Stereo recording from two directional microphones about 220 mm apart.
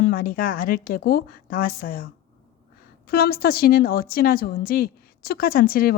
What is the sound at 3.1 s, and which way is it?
A woman's voice, 45° left (ahead or behind).